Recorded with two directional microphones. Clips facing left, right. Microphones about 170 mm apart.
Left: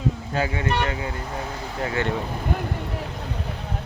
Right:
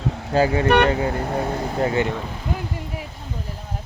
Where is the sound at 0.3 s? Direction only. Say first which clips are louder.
Right 10 dB; 35° right (ahead or behind).